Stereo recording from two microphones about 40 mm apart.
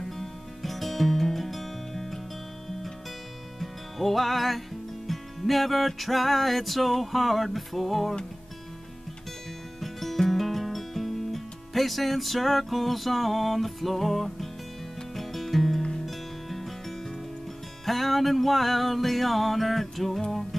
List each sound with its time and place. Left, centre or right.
0.0 s music: centre
3.5 s music: centre
9.8 s music: centre
17.8 s music: centre